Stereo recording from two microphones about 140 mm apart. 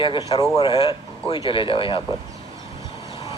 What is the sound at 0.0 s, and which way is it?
A man's voice, 30° left (ahead or behind).